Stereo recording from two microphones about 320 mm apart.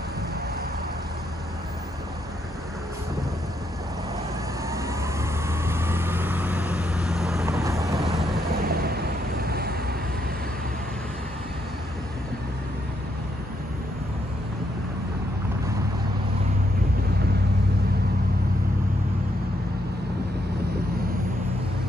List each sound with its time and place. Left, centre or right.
4.6 s vehicle: centre
8.5 s vehicle: right